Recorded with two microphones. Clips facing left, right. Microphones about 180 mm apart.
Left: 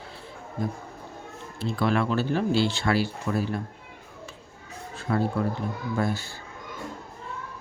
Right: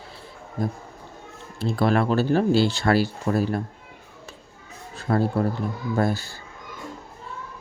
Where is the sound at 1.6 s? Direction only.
40° right (ahead or behind).